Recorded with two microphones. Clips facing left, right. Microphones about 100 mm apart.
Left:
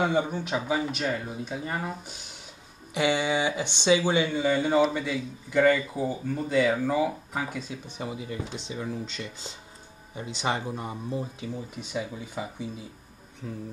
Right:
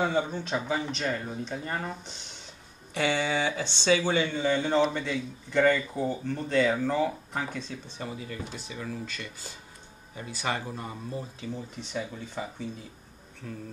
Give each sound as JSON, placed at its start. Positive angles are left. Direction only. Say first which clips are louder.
{"t": 0.0, "sound": "speech", "louder": "left 2 dB", "side_deg": 15}